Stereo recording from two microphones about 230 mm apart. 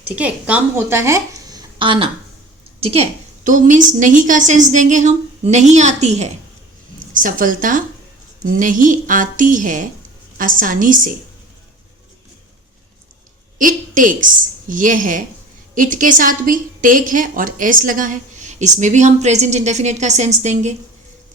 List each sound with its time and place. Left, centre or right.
0.0 s a woman's voice: centre; by 11.1 s right
13.6 s a woman's voice: right